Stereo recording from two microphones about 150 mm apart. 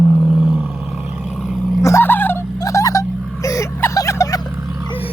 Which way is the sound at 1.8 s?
15° left (ahead or behind).